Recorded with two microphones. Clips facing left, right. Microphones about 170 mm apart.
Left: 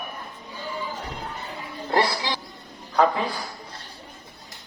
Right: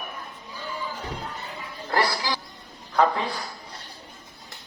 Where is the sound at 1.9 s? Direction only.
25° left (ahead or behind).